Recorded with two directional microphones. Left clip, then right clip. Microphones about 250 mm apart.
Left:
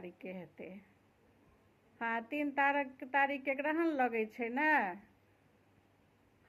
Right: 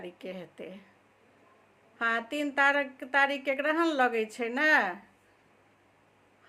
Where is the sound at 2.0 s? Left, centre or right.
Centre.